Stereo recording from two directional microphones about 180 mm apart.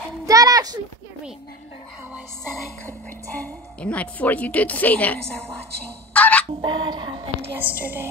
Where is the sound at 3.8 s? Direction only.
5° left (ahead or behind).